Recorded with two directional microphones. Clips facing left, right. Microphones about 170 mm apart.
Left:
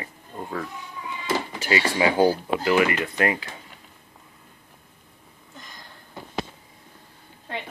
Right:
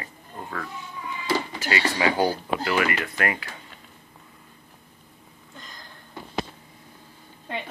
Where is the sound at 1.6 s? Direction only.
20° left (ahead or behind).